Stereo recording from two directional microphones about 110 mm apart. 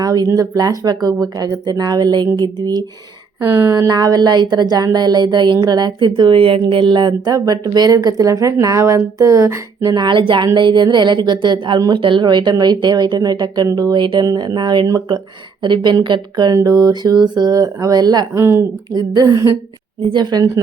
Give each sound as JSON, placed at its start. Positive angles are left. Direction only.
{"t": 0.0, "sound": "speech", "side_deg": -35}
{"t": 3.5, "sound": "speech", "side_deg": -25}
{"t": 9.9, "sound": "speech", "side_deg": -45}
{"t": 18.3, "sound": "speech", "side_deg": -25}